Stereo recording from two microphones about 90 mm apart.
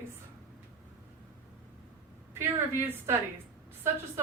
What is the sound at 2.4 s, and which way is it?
Speech, 25° right (ahead or behind).